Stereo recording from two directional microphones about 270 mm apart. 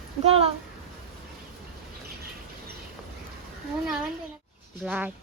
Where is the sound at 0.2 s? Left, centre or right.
Right.